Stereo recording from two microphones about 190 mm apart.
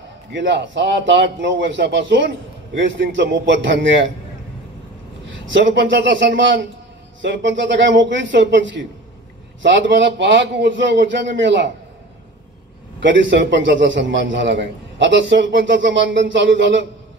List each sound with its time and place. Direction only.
0.3 s a man's voice: 70° right (ahead or behind)
5.2 s a man's voice: 75° right (ahead or behind)
13.0 s a man's voice: 70° right (ahead or behind)